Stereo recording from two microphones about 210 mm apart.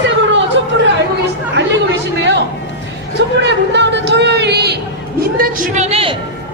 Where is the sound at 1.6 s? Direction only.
55° right (ahead or behind).